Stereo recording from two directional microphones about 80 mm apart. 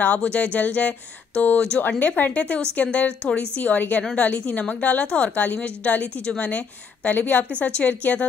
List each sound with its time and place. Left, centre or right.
0.0 s a woman's voice: centre